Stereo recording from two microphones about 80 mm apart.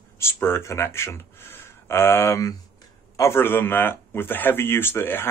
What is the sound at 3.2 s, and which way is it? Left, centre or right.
Speech, left.